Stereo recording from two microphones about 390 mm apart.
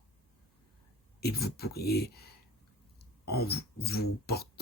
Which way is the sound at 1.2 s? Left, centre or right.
Left.